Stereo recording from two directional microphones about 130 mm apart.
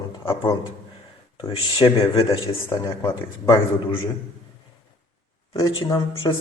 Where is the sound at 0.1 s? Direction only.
35° left (ahead or behind).